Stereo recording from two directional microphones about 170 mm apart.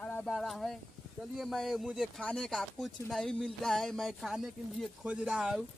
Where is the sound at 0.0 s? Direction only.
10° left (ahead or behind).